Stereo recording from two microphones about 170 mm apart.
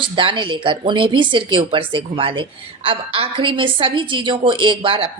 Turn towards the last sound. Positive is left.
turn(degrees=-30)  # may be behind; listen again after turning